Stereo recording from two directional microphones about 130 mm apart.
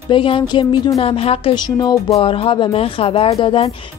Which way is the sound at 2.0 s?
50° left (ahead or behind).